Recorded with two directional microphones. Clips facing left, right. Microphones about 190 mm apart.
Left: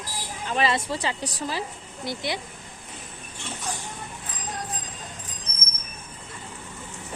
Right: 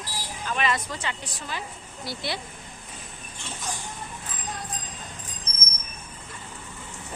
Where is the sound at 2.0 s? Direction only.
20° left (ahead or behind).